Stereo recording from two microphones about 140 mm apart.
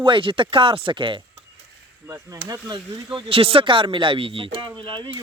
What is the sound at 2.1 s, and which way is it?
Speech, 25° right (ahead or behind).